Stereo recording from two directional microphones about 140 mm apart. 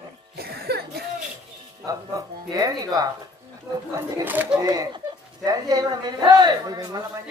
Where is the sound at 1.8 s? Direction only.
25° right (ahead or behind).